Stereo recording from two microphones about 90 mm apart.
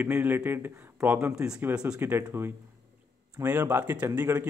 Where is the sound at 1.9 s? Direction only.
25° right (ahead or behind).